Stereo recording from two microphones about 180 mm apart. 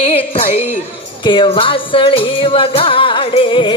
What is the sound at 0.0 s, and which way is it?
Music, 35° left (ahead or behind).